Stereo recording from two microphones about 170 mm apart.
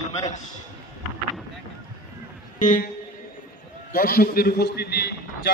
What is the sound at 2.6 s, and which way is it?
Speech, 50° left (ahead or behind).